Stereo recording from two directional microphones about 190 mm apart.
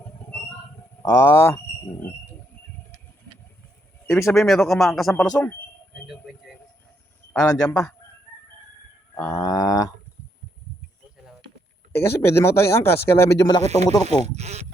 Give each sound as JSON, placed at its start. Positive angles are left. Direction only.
{"t": 1.0, "sound": "speech", "side_deg": 15}
{"t": 4.0, "sound": "speech", "side_deg": 15}
{"t": 4.4, "sound": "speech", "side_deg": 0}
{"t": 5.3, "sound": "speech", "side_deg": 20}
{"t": 7.4, "sound": "speech", "side_deg": 20}
{"t": 9.1, "sound": "livestock", "side_deg": 10}
{"t": 11.9, "sound": "speech", "side_deg": 10}
{"t": 13.7, "sound": "speech", "side_deg": -35}